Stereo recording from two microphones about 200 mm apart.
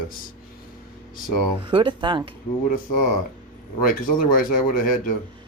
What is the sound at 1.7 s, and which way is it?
Speech, 25° right (ahead or behind).